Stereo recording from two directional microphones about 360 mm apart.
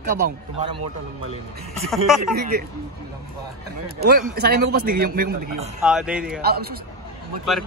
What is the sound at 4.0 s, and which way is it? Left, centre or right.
Speech, right.